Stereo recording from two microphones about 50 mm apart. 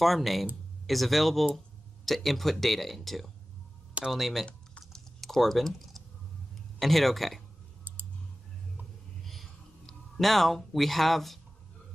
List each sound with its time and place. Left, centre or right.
0.0 s speech: centre
4.9 s typing: centre
6.8 s speech: centre
9.2 s a sound: centre